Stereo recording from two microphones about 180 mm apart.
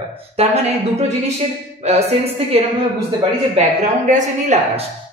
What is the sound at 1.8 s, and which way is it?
Speech, 35° right (ahead or behind).